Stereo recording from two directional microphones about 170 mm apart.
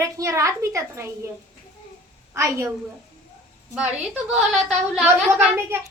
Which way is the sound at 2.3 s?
20° right (ahead or behind).